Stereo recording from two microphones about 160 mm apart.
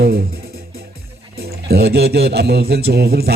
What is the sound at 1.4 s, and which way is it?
A man's voice, 85° right.